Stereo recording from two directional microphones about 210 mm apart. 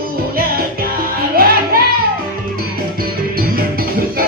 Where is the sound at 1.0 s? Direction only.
45° right (ahead or behind).